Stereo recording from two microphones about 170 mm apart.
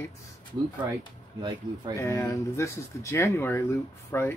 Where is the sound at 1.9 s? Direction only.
15° left (ahead or behind).